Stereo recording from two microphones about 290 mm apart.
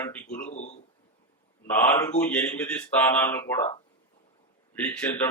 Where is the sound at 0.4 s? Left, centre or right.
Left.